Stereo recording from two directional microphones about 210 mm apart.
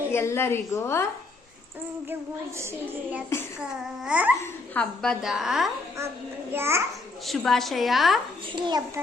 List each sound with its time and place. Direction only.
0.1 s a woman's voice: 10° left (ahead or behind)
4.0 s a woman's voice: 5° right (ahead or behind)
7.3 s a woman's voice: centre (ahead or behind)
8.5 s a child's voice: 20° right (ahead or behind)